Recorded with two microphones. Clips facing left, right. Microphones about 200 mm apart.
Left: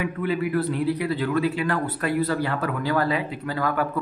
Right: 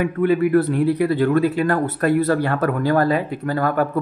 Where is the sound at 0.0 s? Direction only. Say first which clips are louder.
Right 8 dB; 55° right (ahead or behind).